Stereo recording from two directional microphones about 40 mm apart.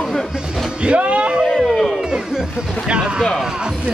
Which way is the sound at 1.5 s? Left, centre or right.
Centre.